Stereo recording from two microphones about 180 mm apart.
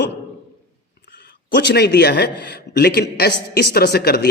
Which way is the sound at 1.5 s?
65° left (ahead or behind).